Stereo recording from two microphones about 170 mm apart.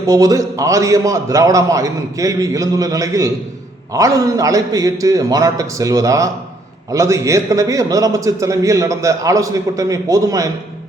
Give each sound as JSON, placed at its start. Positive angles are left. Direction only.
{"t": 0.0, "sound": "a man's voice", "side_deg": -20}